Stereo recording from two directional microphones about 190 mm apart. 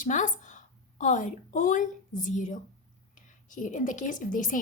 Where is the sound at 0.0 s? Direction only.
40° left (ahead or behind).